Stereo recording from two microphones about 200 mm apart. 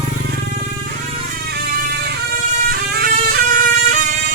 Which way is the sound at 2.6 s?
50° right (ahead or behind).